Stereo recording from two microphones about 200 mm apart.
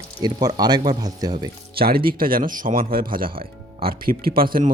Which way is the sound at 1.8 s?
50° right (ahead or behind).